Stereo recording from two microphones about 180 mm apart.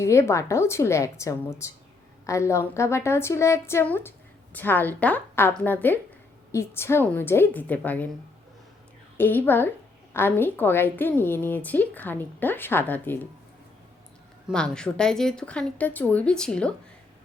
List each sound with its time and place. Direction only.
0.0 s a woman's voice: 15° left (ahead or behind)
9.1 s a woman's voice: 10° left (ahead or behind)
14.4 s speech: 5° left (ahead or behind)